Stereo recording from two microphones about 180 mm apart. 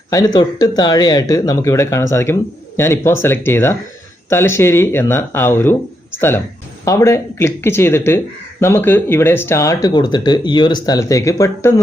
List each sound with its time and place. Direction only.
0.1 s speech: 20° left (ahead or behind)